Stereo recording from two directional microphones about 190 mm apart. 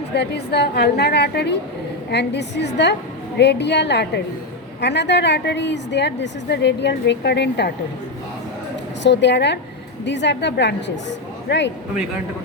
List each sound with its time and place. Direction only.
0.1 s a woman's voice: 60° left (ahead or behind)
9.0 s a woman's voice: 65° left (ahead or behind)